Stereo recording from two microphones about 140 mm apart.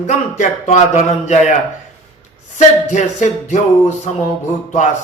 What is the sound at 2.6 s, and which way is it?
A man's voice, 60° left (ahead or behind).